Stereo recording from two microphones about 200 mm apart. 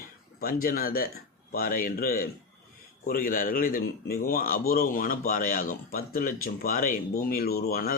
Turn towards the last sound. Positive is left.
turn(degrees=50)  # may be behind; listen again after turning